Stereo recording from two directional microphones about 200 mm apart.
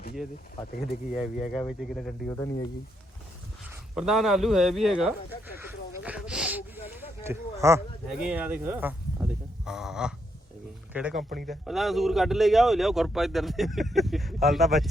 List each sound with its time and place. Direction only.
1.1 s speech: centre (ahead or behind)
2.3 s speech: 15° left (ahead or behind)
3.9 s speech: centre (ahead or behind)
5.5 s a sound: 10° right (ahead or behind)
8.2 s speech: 5° right (ahead or behind)
11.1 s speech: 45° right (ahead or behind)
11.4 s speech: centre (ahead or behind)